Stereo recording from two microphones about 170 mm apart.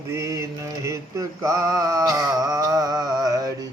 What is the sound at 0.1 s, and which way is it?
A man's voice, 20° right (ahead or behind).